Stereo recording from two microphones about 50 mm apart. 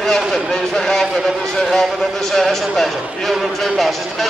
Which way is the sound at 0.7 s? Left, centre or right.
Centre.